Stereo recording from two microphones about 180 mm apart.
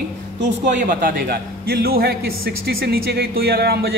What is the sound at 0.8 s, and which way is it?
A man's voice, 50° right (ahead or behind).